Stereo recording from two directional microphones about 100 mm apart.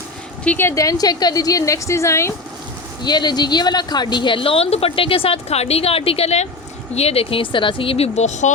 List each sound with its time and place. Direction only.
0.4 s speech: 20° left (ahead or behind)
0.8 s a woman's voice: 35° left (ahead or behind)
3.0 s speech: 45° left (ahead or behind); by 8.3 s 90° left